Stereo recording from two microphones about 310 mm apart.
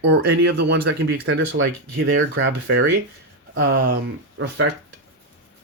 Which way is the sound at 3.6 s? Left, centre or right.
Right.